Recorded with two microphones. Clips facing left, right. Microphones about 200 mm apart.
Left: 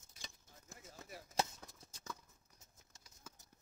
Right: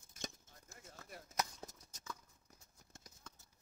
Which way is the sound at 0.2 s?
45° right (ahead or behind).